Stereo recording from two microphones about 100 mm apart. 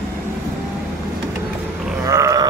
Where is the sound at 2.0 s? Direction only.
35° right (ahead or behind).